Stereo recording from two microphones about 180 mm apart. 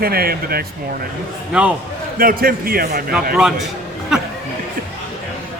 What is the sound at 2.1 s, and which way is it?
Speech, 55° right (ahead or behind).